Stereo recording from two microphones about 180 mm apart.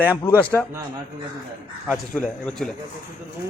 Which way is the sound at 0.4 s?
5° left (ahead or behind).